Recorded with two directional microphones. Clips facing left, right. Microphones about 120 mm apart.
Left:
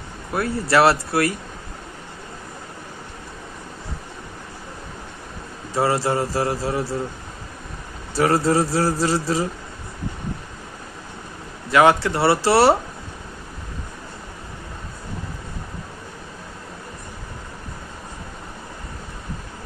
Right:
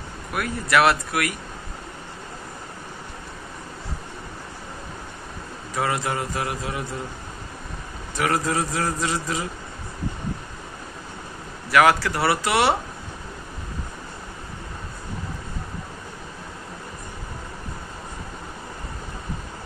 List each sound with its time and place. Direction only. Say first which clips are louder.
0.3 s speech: left 3 dB; 30° left (ahead or behind)
5.8 s speech: left 5 dB; 30° left (ahead or behind)
8.1 s speech: left 5 dB; 30° left (ahead or behind)
11.7 s speech: left 2 dB; 25° left (ahead or behind)